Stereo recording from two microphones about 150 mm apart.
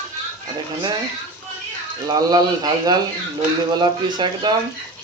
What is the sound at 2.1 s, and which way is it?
Speech, 25° right (ahead or behind).